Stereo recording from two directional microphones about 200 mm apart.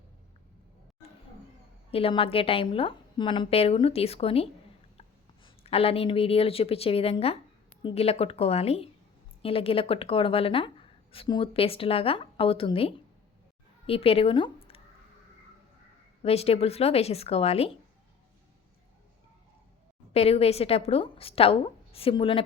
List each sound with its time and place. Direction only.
1.9 s a woman's voice: 30° left (ahead or behind)
16.2 s a woman's voice: 30° left (ahead or behind)
20.1 s speech: 30° left (ahead or behind)